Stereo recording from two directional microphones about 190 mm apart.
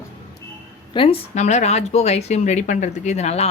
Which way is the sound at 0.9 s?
30° left (ahead or behind).